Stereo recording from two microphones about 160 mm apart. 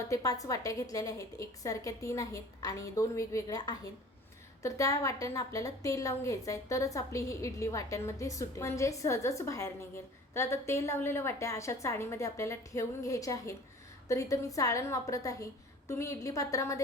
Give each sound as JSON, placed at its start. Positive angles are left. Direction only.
{"t": 0.1, "sound": "a woman's voice", "side_deg": 20}